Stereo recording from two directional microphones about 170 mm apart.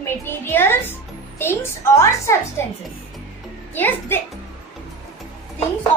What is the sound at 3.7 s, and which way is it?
Speech, 10° left (ahead or behind).